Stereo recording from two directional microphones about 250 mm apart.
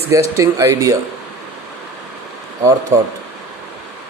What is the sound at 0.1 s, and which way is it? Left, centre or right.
Speech, centre.